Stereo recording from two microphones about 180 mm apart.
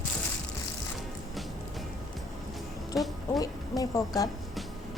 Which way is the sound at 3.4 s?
20° left (ahead or behind).